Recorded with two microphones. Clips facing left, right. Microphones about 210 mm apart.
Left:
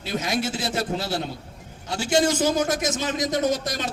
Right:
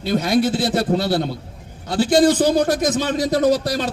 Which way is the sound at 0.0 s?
35° right (ahead or behind).